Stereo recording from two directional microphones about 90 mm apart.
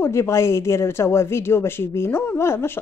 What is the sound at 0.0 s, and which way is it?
Speech, 30° left (ahead or behind).